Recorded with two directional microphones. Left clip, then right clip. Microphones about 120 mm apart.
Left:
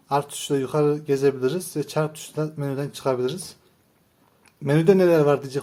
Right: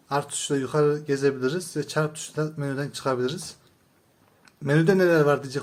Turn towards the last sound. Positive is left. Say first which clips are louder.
# left 2 dB
turn(degrees=15)  # may be behind; listen again after turning